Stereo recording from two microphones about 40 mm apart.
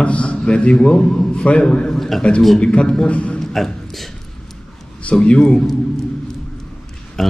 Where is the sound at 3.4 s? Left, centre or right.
Centre.